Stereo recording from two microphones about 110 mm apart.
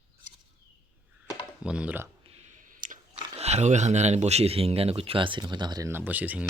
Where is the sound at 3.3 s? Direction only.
75° right (ahead or behind); by 5.9 s 40° right (ahead or behind).